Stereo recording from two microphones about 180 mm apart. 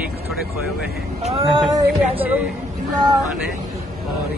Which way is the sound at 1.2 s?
30° right (ahead or behind).